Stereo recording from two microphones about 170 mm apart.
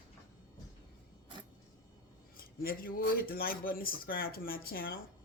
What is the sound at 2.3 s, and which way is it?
A man's voice, 60° left (ahead or behind).